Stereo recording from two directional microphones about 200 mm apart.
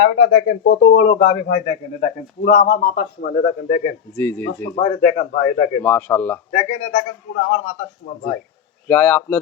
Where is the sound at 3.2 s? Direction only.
40° left (ahead or behind).